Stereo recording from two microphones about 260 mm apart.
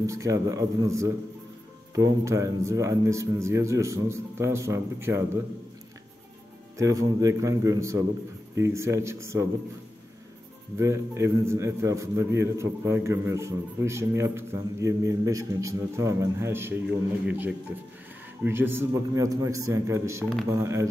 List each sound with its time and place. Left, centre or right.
0.0 s a man's voice: centre
6.8 s a man's voice: centre
10.8 s a man's voice: centre